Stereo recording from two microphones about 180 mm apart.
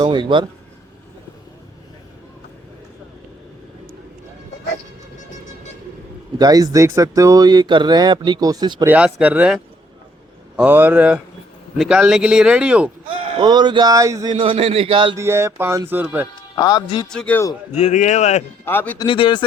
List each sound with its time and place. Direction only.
0.0 s speech: 25° right (ahead or behind)
6.4 s speech: 20° right (ahead or behind)
8.9 s speech: 5° right (ahead or behind)
10.6 s speech: 10° right (ahead or behind)
13.2 s speech: 25° right (ahead or behind)
14.3 s speech: 30° right (ahead or behind)
15.1 s speech: 15° right (ahead or behind)
16.6 s speech: 20° left (ahead or behind)
17.1 s speech: 5° left (ahead or behind)
17.7 s speech: 40° left (ahead or behind)
18.6 s a man's voice: 10° left (ahead or behind)
18.9 s speech: 30° left (ahead or behind)